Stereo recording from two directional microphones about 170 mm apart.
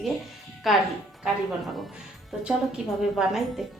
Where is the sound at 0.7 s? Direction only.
Centre (ahead or behind).